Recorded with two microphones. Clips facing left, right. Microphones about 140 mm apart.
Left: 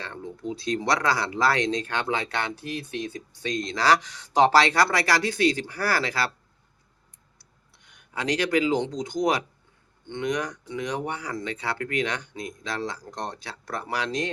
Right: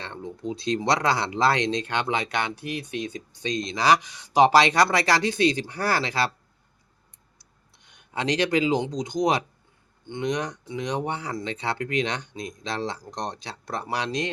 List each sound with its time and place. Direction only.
0.0 s speech: 20° right (ahead or behind)
7.3 s a sound: 20° right (ahead or behind)
10.1 s speech: 20° right (ahead or behind)